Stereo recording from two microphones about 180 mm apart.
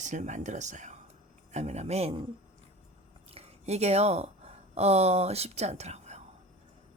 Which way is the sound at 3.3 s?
35° right (ahead or behind).